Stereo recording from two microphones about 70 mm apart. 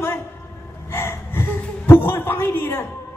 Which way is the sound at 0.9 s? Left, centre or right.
Left.